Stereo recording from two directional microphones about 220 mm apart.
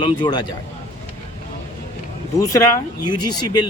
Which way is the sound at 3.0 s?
20° left (ahead or behind).